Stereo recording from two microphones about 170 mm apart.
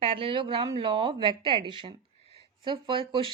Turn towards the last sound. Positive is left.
turn(degrees=-30)  # may be behind; listen again after turning